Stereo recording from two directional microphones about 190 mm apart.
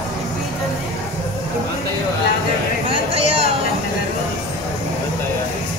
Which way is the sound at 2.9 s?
30° right (ahead or behind).